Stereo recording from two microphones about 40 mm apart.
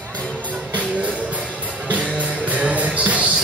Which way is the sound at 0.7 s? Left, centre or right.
Right.